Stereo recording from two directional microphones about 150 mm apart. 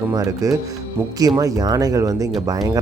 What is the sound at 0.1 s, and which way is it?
Speech, 20° right (ahead or behind).